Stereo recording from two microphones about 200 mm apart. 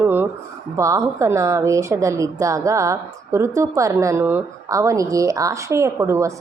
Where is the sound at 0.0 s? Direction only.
10° right (ahead or behind).